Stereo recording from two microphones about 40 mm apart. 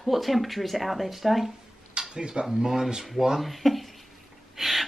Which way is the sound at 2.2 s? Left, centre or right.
Right.